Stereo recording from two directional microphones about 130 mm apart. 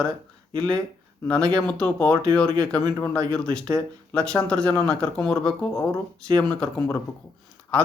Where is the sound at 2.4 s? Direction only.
25° right (ahead or behind).